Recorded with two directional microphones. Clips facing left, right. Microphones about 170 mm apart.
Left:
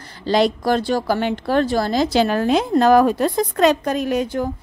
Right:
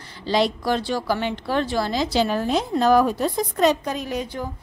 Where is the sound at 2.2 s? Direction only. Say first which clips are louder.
Left 4 dB; 80° left.